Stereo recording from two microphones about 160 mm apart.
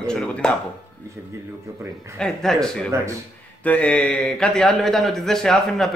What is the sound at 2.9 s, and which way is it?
Speech, 20° right (ahead or behind).